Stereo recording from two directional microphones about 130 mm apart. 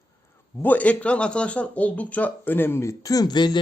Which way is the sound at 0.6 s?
10° left (ahead or behind).